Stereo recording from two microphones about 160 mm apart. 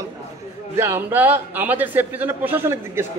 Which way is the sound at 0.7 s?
15° right (ahead or behind).